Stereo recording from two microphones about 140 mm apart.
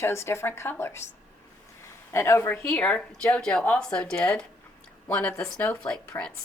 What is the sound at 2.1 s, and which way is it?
A woman's voice, 20° left (ahead or behind).